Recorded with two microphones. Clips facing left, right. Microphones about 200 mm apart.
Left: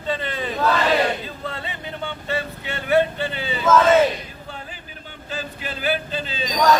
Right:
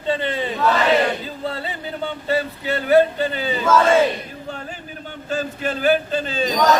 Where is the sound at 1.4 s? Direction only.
35° right (ahead or behind).